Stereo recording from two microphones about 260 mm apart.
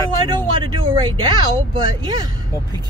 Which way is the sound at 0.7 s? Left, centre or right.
Centre.